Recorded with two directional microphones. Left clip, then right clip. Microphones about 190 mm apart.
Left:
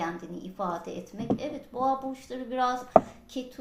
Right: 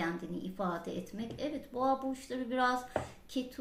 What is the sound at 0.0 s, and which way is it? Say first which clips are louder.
Speech: left 3 dB; 25° right (ahead or behind).